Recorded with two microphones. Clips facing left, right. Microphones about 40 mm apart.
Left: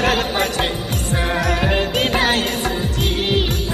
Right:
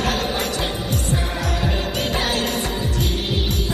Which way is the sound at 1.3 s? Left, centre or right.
Left.